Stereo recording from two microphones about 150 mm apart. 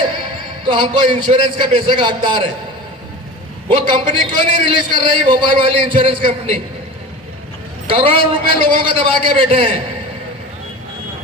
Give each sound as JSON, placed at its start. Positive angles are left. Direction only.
{"t": 0.7, "sound": "a man's voice", "side_deg": -30}
{"t": 3.8, "sound": "a man's voice", "side_deg": -30}
{"t": 7.9, "sound": "a man's voice", "side_deg": -35}